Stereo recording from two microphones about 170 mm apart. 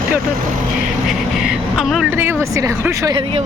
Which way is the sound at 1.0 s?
5° right (ahead or behind).